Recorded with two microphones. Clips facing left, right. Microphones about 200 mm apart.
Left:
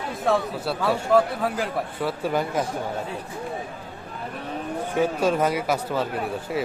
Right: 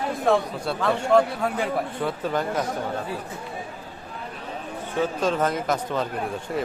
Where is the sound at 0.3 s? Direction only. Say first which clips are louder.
Right 1 dB; centre (ahead or behind).